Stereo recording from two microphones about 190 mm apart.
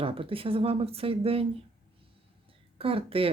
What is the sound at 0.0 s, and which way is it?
Speech, 30° right (ahead or behind).